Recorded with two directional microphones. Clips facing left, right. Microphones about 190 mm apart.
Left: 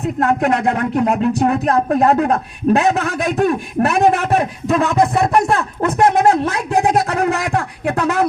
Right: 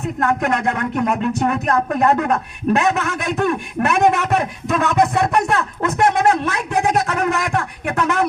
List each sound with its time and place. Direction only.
0.2 s speech: 20° left (ahead or behind)
0.4 s speech: 35° left (ahead or behind)